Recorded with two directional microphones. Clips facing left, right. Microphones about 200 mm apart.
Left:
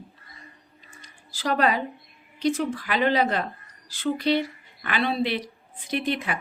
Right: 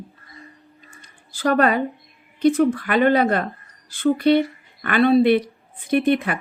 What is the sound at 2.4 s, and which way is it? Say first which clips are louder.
A woman's voice: right 8 dB; 55° right (ahead or behind).